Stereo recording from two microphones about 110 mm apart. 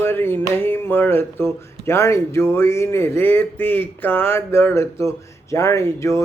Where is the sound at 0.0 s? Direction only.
20° left (ahead or behind).